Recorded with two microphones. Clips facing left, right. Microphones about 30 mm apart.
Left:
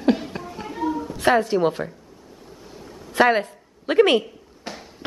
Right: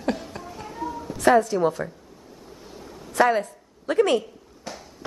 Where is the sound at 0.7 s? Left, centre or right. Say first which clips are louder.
Left 6 dB; left.